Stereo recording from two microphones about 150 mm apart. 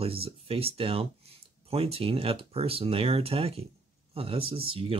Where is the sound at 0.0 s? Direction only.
40° right (ahead or behind).